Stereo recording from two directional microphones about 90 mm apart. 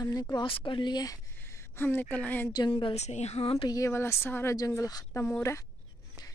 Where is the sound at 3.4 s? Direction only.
90° left.